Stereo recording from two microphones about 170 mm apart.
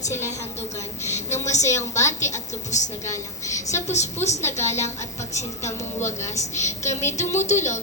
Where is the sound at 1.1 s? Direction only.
45° left (ahead or behind).